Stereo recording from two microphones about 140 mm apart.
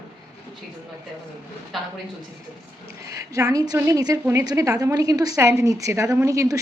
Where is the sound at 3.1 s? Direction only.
25° right (ahead or behind).